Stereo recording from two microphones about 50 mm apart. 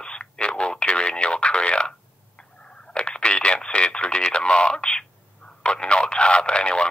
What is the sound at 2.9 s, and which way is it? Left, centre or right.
Speech, centre.